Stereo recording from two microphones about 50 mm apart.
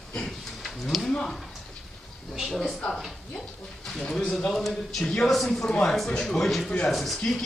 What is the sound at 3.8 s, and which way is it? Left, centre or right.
A man's voice, centre.